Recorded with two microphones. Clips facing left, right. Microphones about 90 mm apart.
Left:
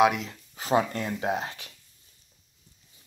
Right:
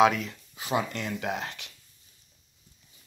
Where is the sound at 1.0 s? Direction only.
25° left (ahead or behind).